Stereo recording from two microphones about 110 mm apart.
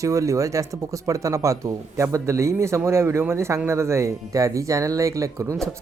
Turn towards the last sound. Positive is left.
turn(degrees=-30)  # may be behind; listen again after turning